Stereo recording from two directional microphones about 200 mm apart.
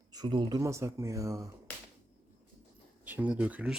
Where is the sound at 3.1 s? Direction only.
10° right (ahead or behind).